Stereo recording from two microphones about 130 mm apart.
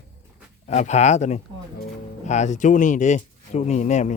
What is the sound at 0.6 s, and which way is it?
Speech, 60° left (ahead or behind).